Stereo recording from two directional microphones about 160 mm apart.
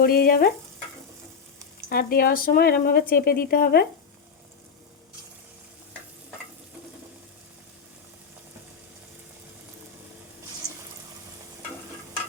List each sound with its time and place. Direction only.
0.0 s stir: 70° left (ahead or behind)
1.9 s speech: 65° left (ahead or behind)